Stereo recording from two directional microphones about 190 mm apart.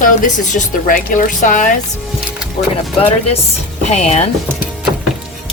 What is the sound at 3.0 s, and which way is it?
Speech, 30° left (ahead or behind).